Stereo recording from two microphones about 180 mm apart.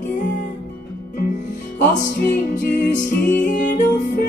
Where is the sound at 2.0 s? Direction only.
45° left (ahead or behind).